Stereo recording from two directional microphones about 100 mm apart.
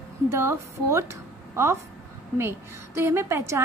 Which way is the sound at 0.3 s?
25° right (ahead or behind).